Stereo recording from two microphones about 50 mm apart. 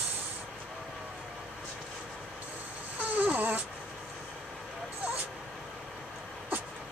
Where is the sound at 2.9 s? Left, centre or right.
Right.